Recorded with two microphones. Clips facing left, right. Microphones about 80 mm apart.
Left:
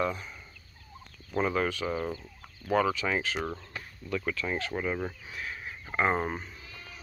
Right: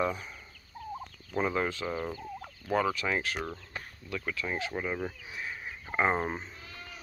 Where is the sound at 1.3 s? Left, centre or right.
Centre.